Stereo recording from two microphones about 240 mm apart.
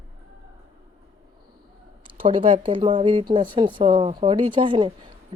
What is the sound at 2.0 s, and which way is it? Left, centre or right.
Speech, right.